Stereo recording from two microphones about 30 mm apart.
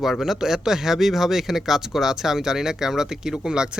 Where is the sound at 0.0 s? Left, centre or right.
Centre.